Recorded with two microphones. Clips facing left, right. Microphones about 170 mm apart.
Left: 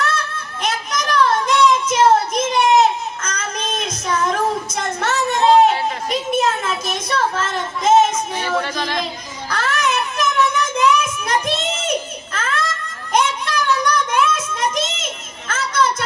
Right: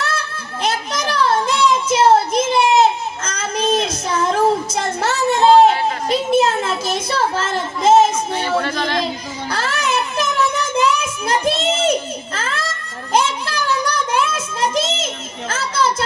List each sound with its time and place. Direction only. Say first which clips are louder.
0.6 s child singing: right 2 dB; 30° right (ahead or behind)
6.1 s a child's voice: right 4 dB; 30° right (ahead or behind)
8.6 s yodeling: right 3 dB; 10° left (ahead or behind)
9.5 s child singing: left 1 dB; 30° right (ahead or behind)